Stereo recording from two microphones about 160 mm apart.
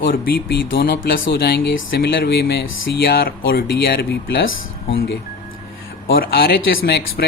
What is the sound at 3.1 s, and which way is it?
Speech, 70° left (ahead or behind).